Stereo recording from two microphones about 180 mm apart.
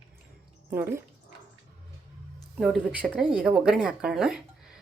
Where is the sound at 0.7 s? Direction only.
15° right (ahead or behind).